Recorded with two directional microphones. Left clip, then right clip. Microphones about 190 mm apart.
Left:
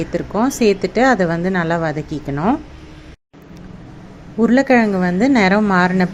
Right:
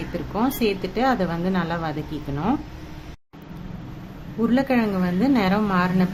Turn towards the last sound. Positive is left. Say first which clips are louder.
# left 7 dB
turn(degrees=30)  # may be behind; listen again after turning